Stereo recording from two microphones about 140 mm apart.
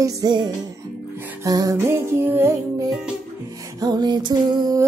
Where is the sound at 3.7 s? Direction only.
30° right (ahead or behind).